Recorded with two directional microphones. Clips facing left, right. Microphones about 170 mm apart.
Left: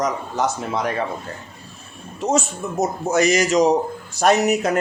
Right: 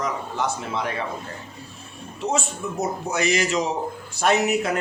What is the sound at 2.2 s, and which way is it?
Speech, 40° left (ahead or behind).